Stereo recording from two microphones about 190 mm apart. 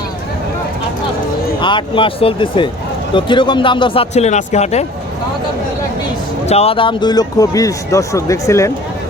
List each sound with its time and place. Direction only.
1.6 s a man's voice: 25° left (ahead or behind)
6.5 s a man's voice: 30° left (ahead or behind); by 8.7 s 15° left (ahead or behind)